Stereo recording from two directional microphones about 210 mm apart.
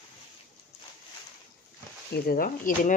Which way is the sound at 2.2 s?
45° left (ahead or behind).